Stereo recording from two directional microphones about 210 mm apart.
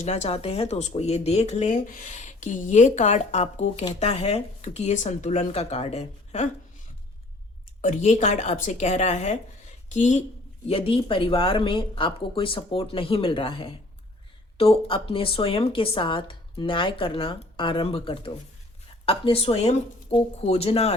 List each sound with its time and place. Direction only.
0.0 s speech: 30° left (ahead or behind)
7.8 s a woman's voice: 35° left (ahead or behind)